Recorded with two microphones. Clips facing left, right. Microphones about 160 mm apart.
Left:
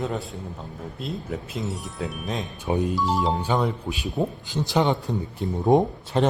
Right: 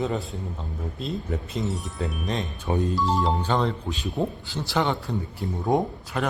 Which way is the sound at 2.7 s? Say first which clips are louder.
Left 1 dB; 15° left (ahead or behind).